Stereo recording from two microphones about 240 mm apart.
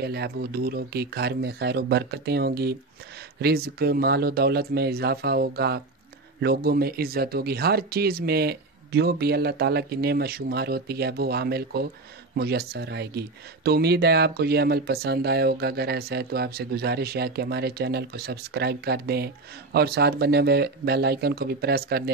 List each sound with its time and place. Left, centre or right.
0.0 s speech: right